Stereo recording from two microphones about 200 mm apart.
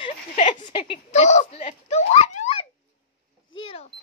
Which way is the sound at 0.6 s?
25° left (ahead or behind).